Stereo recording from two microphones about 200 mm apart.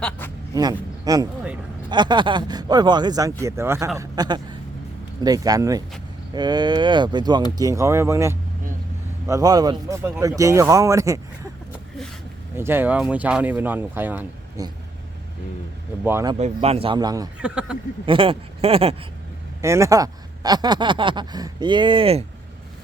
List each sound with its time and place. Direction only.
0.5 s speech: 20° right (ahead or behind)
12.5 s speech: 10° right (ahead or behind)
16.0 s speech: 10° right (ahead or behind)
16.4 s speech: 30° right (ahead or behind)
17.3 s speech: 5° right (ahead or behind)
18.0 s speech: 25° right (ahead or behind)
19.6 s speech: 15° right (ahead or behind)